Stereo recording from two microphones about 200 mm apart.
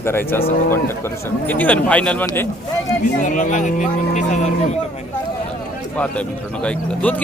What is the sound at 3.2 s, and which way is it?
Speech, 40° left (ahead or behind).